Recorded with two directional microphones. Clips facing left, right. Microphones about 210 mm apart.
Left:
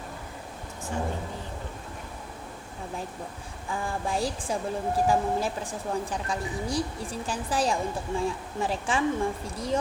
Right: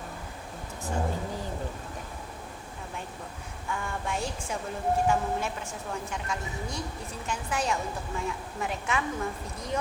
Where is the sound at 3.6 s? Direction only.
30° left (ahead or behind).